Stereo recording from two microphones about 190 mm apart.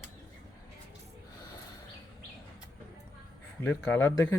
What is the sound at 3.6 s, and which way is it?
Speech, 10° left (ahead or behind).